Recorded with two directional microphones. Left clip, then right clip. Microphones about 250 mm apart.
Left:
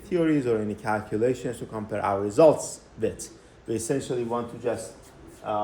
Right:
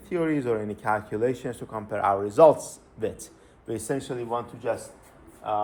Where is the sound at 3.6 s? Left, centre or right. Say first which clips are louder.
Left 2 dB; centre.